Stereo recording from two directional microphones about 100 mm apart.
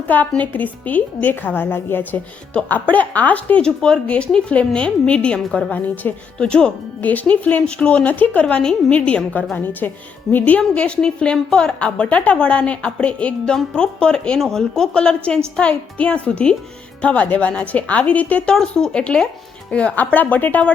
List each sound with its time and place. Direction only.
0.1 s a woman's voice: 15° left (ahead or behind)